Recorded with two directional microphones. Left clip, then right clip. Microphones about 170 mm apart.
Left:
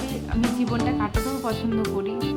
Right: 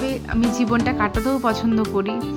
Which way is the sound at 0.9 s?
35° right (ahead or behind).